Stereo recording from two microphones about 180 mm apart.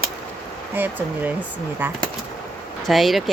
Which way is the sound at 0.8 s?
10° right (ahead or behind).